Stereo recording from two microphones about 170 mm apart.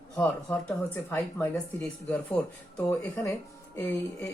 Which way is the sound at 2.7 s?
15° left (ahead or behind).